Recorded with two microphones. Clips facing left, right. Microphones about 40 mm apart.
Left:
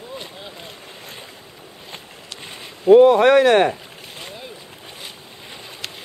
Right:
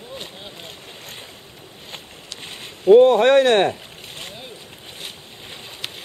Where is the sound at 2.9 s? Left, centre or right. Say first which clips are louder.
Even; right.